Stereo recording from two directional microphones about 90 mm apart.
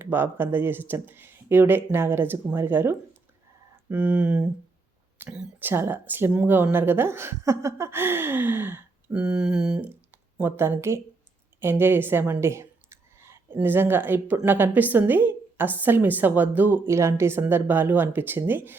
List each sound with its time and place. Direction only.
0.0 s a woman's voice: 25° right (ahead or behind)
5.5 s a woman's voice: 25° right (ahead or behind)
9.2 s speech: 10° right (ahead or behind)
10.4 s a woman's voice: 25° right (ahead or behind)
12.3 s a sound: 30° right (ahead or behind)
14.4 s a woman's voice: 20° right (ahead or behind)